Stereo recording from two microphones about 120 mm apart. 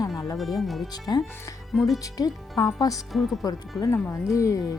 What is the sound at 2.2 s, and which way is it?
Speech, 30° left (ahead or behind).